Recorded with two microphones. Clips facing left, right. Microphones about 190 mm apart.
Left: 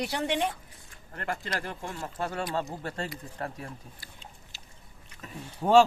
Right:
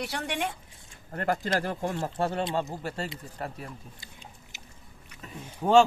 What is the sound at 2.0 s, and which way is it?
Speech, 25° right (ahead or behind).